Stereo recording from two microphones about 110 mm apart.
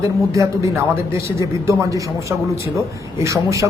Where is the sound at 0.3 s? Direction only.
30° right (ahead or behind).